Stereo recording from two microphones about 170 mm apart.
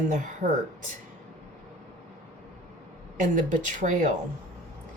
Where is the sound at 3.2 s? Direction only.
50° right (ahead or behind).